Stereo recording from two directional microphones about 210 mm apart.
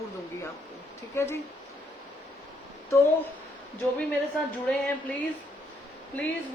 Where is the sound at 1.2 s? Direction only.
10° left (ahead or behind).